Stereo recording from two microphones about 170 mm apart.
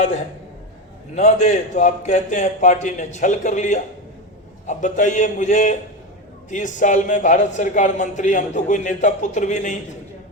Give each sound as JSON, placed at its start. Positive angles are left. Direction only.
{"t": 1.1, "sound": "a man's voice", "side_deg": 45}